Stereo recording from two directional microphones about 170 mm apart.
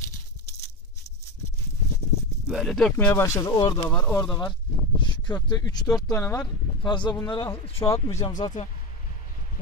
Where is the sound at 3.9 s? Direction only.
5° left (ahead or behind).